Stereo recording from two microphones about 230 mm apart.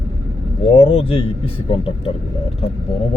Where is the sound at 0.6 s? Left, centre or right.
Left.